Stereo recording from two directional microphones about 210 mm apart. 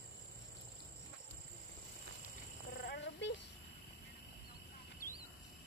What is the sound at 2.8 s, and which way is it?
Purr, 55° left (ahead or behind).